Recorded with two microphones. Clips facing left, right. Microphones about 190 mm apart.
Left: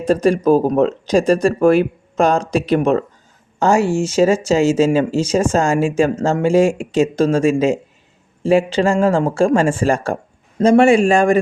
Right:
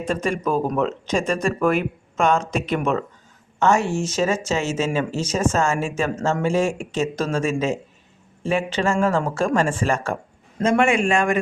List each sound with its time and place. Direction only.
0.0 s speech: 35° left (ahead or behind)